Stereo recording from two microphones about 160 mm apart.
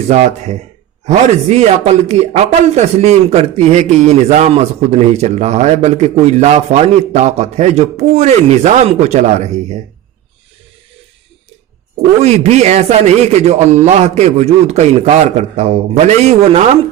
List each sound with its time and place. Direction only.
0.1 s a man's voice: 45° right (ahead or behind)
12.2 s a man's voice: 45° right (ahead or behind)